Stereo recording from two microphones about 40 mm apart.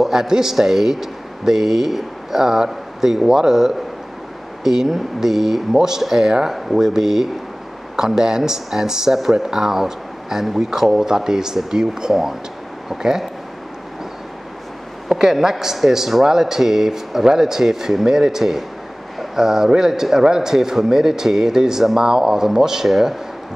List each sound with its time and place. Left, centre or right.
0.0 s a man's voice: centre
15.0 s a man's voice: centre